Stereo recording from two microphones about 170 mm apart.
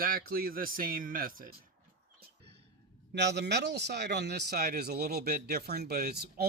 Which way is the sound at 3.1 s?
80° right.